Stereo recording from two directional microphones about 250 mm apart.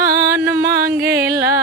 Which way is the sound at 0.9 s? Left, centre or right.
Right.